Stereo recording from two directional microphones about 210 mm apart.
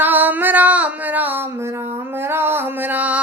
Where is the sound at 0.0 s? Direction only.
10° right (ahead or behind).